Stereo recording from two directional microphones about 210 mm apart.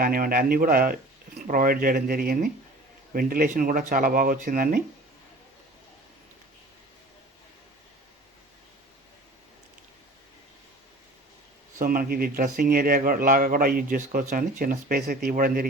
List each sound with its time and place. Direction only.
0.0 s speech: 45° right (ahead or behind)
11.8 s speech: 40° right (ahead or behind)